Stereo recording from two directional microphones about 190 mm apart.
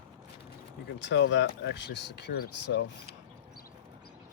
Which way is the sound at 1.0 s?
75° left (ahead or behind).